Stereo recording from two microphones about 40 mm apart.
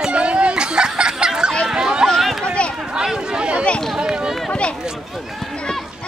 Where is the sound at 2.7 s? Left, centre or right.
Centre.